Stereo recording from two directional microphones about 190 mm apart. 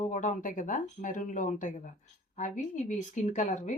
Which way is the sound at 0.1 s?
40° left (ahead or behind).